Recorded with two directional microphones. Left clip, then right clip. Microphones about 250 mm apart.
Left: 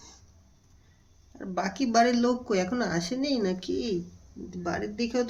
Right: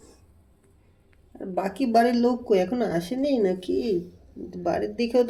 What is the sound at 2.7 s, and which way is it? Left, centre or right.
Speech, centre.